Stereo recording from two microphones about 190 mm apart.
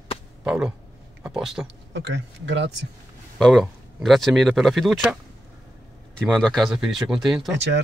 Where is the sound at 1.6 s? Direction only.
70° right (ahead or behind).